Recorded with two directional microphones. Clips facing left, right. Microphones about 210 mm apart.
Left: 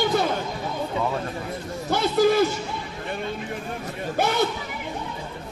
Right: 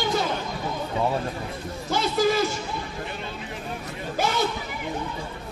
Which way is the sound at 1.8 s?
55° left (ahead or behind).